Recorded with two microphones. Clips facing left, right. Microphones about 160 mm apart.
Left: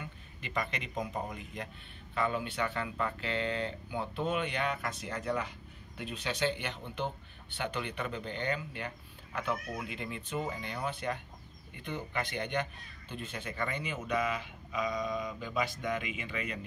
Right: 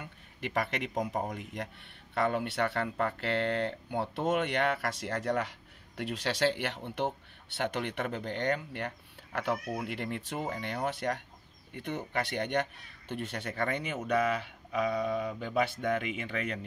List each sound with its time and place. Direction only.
0.0 s speech: 60° right (ahead or behind)